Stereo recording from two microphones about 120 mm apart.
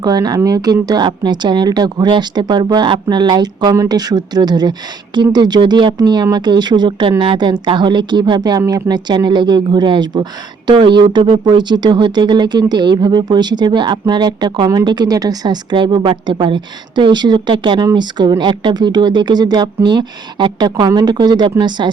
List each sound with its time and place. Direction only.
0.0 s speech: 35° right (ahead or behind)